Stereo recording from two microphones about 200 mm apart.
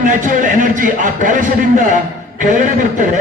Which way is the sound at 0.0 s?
40° right (ahead or behind).